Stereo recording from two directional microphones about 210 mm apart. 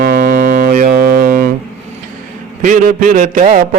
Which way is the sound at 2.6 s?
40° right (ahead or behind).